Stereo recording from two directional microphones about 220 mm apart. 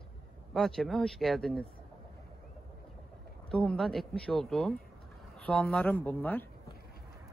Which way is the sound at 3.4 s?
5° left (ahead or behind).